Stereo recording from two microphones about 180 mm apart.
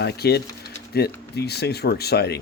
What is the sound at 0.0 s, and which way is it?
Speech, 65° left (ahead or behind).